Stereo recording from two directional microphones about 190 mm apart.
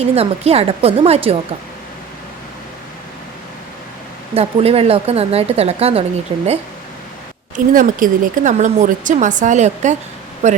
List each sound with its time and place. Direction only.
0.0 s speech: 35° right (ahead or behind)
4.4 s speech: 30° right (ahead or behind)
7.5 s speech: 45° right (ahead or behind)